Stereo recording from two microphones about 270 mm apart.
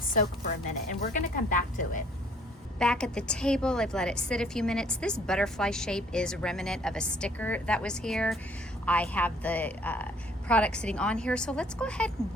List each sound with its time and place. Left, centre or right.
0.9 s speech: left
2.7 s a woman's voice: centre